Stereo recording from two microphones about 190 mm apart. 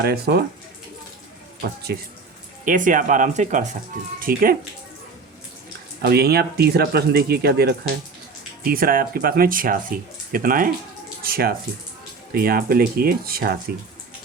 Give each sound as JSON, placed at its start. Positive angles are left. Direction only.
{"t": 0.0, "sound": "speech", "side_deg": -60}
{"t": 1.6, "sound": "speech", "side_deg": -55}
{"t": 2.6, "sound": "speech", "side_deg": -45}
{"t": 6.0, "sound": "speech", "side_deg": -55}